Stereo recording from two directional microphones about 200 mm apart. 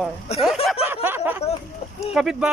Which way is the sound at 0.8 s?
10° right (ahead or behind).